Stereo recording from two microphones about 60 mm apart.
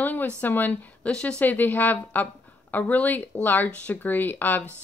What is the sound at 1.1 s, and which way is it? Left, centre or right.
Speech, centre.